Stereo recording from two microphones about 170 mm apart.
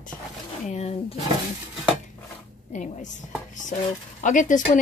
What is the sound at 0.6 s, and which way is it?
Speech, 40° left (ahead or behind).